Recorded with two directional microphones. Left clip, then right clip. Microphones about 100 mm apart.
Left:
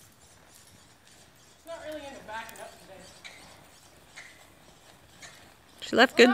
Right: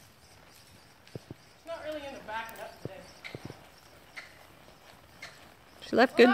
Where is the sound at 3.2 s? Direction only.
10° left (ahead or behind).